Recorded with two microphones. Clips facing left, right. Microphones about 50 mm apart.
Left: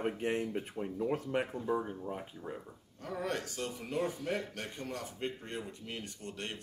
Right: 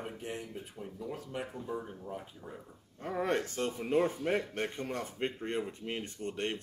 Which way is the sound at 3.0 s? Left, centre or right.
Right.